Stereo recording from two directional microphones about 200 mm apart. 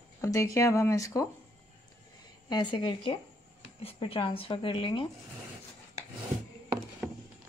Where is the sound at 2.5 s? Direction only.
25° left (ahead or behind).